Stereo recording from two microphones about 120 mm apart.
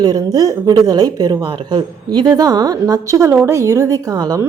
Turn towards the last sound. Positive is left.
turn(degrees=-30)  # may be behind; listen again after turning